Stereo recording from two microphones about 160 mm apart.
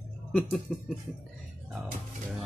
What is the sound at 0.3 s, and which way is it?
Speech, 5° left (ahead or behind).